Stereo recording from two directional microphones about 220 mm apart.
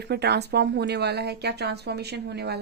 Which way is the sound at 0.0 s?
50° right (ahead or behind).